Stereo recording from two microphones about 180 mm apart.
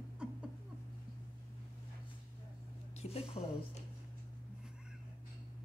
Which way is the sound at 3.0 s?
35° left (ahead or behind).